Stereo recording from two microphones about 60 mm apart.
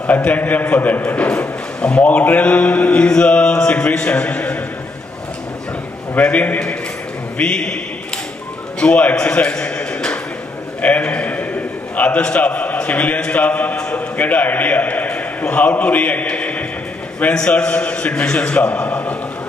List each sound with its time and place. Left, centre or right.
0.0 s a man's voice: left
6.1 s a man's voice: left
9.2 s a sound: left
10.8 s a man's voice: left